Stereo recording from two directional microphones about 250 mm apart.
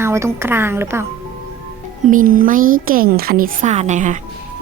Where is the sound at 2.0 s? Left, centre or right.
Right.